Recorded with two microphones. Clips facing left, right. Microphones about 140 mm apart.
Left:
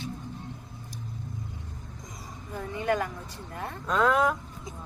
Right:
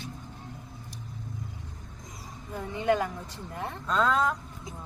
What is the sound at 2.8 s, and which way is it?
Speech, 20° right (ahead or behind).